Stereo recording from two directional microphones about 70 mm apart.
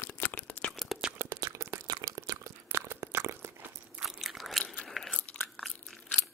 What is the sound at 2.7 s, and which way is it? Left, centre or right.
Crunch, right.